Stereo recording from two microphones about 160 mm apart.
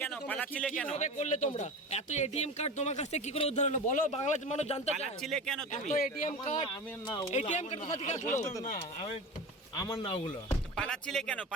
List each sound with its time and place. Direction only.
0.1 s a sound: 10° left (ahead or behind)
0.9 s speech: 50° left (ahead or behind)
5.2 s speech: 5° left (ahead or behind)
5.7 s speech: 45° left (ahead or behind)
6.6 s speech: 25° left (ahead or behind)
7.3 s speech: 45° left (ahead or behind)
10.0 s speech: 35° left (ahead or behind)
10.8 s speech: 5° left (ahead or behind)